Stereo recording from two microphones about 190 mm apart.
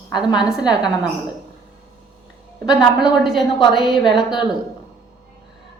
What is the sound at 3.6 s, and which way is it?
Speech, 25° left (ahead or behind).